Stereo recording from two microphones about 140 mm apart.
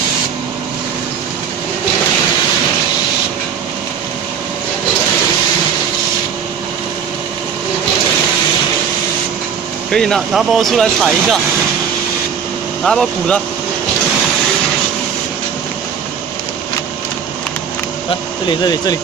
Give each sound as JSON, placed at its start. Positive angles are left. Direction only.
{"t": 9.8, "sound": "speech", "side_deg": 5}
{"t": 12.8, "sound": "speech", "side_deg": 5}
{"t": 18.5, "sound": "speech", "side_deg": 30}